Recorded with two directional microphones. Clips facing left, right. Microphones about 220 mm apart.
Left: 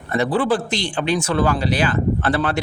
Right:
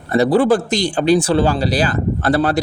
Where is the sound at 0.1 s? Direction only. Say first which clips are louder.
Right 6 dB; 35° right (ahead or behind).